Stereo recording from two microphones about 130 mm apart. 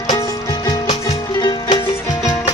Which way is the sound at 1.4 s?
30° left (ahead or behind).